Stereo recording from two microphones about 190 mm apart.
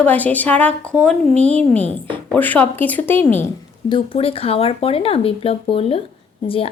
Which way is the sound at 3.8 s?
25° left (ahead or behind).